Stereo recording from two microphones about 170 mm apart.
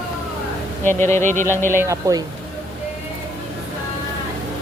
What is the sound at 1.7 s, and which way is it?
Speech, 15° right (ahead or behind).